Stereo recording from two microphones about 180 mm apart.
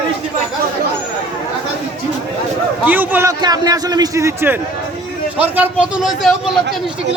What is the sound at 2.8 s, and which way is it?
A man's voice, 10° right (ahead or behind).